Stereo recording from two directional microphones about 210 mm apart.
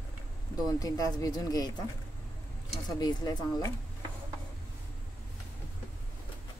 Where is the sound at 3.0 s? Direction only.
20° left (ahead or behind).